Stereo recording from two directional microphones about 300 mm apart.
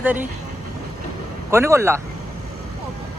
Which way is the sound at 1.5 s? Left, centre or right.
Centre.